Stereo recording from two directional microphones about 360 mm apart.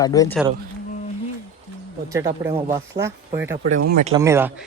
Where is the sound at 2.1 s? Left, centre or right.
Centre.